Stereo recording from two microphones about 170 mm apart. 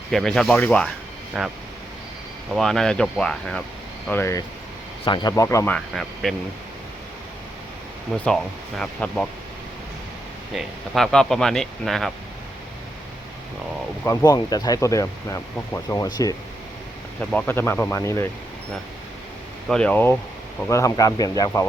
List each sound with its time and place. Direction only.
0.1 s speech: centre (ahead or behind)
2.6 s speech: 5° left (ahead or behind)
4.1 s speech: 15° left (ahead or behind)
5.0 s speech: 25° left (ahead or behind)
5.7 s speech: centre (ahead or behind)
8.1 s speech: 5° left (ahead or behind)
10.5 s speech: centre (ahead or behind)
14.0 s speech: 15° left (ahead or behind)
17.2 s speech: 10° left (ahead or behind)
19.6 s speech: 5° left (ahead or behind)